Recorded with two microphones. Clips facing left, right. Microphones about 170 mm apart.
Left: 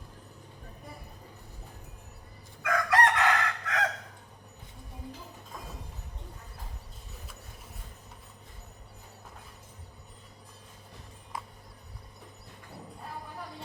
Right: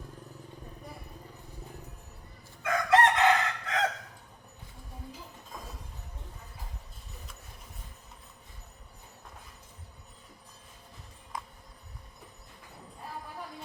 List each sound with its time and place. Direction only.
2.6 s chicken: 25° right (ahead or behind)